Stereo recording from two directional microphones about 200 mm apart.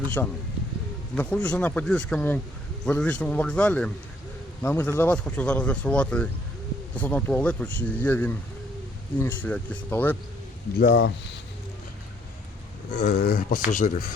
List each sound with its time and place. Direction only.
0.2 s speech: 5° left (ahead or behind)
10.8 s speech: 65° left (ahead or behind)
13.0 s speech: 50° left (ahead or behind)